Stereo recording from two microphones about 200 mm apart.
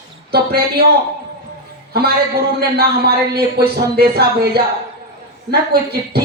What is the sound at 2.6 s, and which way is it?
Speech, 50° right (ahead or behind).